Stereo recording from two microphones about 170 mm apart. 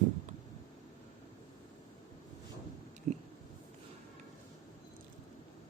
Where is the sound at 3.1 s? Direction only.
45° right (ahead or behind).